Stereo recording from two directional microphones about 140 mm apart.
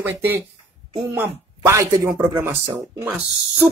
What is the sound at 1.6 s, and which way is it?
Speech, 20° right (ahead or behind).